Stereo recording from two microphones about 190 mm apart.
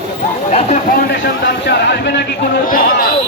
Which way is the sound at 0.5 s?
35° left (ahead or behind).